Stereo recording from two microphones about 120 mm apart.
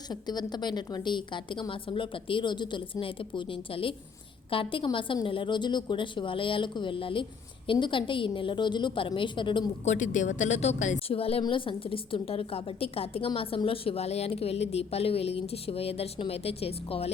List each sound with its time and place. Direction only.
0.1 s a woman's voice: 35° left (ahead or behind)
9.8 s a woman's voice: 85° left
11.1 s a woman's voice: 50° left (ahead or behind)